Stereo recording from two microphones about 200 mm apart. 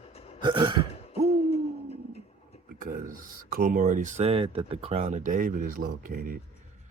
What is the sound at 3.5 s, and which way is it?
Speech, 45° right (ahead or behind).